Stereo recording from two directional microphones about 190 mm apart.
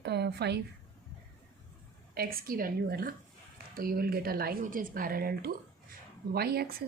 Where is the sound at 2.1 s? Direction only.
50° right (ahead or behind).